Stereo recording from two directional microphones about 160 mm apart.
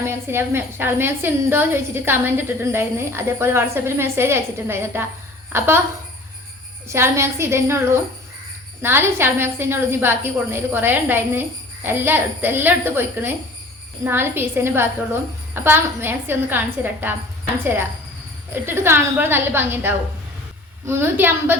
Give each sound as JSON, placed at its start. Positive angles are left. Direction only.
{"t": 0.0, "sound": "a woman's voice", "side_deg": -15}
{"t": 6.8, "sound": "a woman's voice", "side_deg": -15}
{"t": 8.8, "sound": "a woman's voice", "side_deg": -15}
{"t": 18.5, "sound": "a woman's voice", "side_deg": -15}